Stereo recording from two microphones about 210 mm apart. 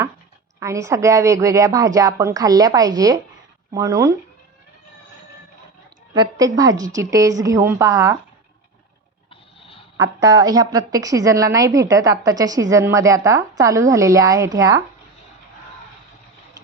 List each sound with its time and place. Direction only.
0.6 s a woman's voice: 15° right (ahead or behind)
6.1 s a woman's voice: 20° right (ahead or behind)
9.3 s a sound: 25° left (ahead or behind)
10.0 s a woman's voice: 15° right (ahead or behind)